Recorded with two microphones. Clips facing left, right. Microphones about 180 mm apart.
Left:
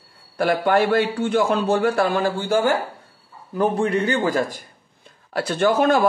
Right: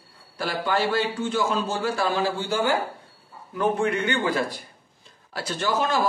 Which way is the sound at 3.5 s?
35° left (ahead or behind).